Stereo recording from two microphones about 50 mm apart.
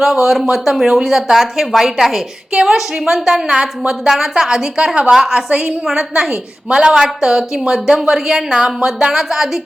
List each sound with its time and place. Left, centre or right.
0.0 s a woman's voice: centre
2.5 s a woman's voice: centre